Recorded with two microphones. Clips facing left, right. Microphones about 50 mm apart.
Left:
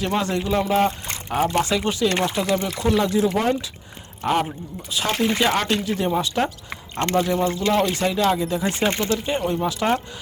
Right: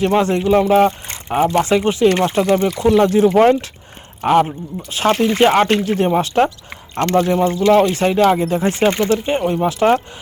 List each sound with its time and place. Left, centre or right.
0.0 s speech: right
2.2 s speech: right
2.6 s speech: right
3.0 s speech: right
4.2 s speech: right